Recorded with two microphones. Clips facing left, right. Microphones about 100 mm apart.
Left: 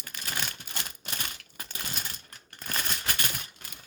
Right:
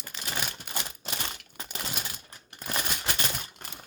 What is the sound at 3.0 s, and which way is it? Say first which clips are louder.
Typewriter: right 2 dB; 25° right (ahead or behind).